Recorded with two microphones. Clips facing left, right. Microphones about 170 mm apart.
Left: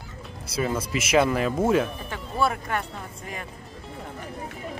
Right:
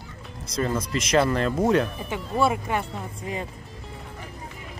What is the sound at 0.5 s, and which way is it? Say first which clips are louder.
Speech: right 1 dB; 10° left (ahead or behind).